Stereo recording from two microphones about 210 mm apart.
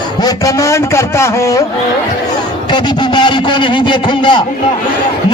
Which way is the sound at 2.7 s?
20° left (ahead or behind).